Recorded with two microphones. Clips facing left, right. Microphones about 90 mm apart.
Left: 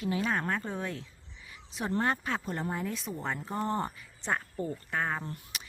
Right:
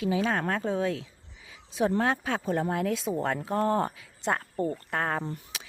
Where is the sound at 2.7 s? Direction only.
90° right.